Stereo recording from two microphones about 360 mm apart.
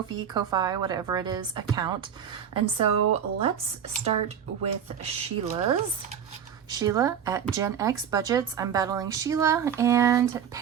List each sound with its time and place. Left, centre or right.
0.3 s speech: centre